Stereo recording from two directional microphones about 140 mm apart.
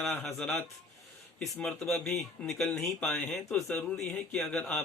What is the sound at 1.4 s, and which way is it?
A man's voice, 5° left (ahead or behind).